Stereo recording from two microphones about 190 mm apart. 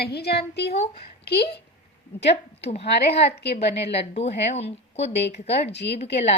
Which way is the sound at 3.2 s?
60° left (ahead or behind).